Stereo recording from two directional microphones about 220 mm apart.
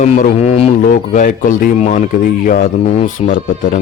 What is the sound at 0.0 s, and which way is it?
Speech, 35° left (ahead or behind).